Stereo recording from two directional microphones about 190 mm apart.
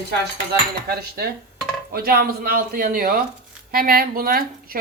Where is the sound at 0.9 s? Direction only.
55° right (ahead or behind).